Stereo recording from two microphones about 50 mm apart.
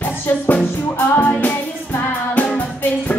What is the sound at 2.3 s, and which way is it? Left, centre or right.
Music, left.